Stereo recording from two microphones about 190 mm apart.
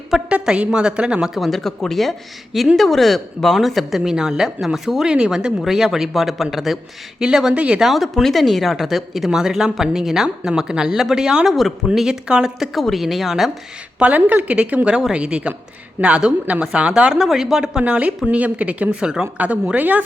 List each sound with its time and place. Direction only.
0.1 s a woman's voice: 5° right (ahead or behind)